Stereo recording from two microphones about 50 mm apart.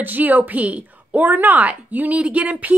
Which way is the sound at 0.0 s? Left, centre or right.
Right.